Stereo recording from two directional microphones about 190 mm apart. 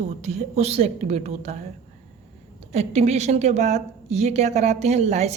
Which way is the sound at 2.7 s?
35° right (ahead or behind).